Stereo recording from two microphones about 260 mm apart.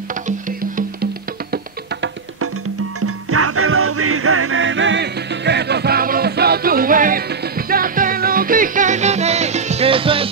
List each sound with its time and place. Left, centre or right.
3.0 s music: right